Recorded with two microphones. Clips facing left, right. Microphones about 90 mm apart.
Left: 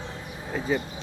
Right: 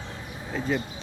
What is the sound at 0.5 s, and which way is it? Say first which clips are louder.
Speech: left 1 dB; centre (ahead or behind).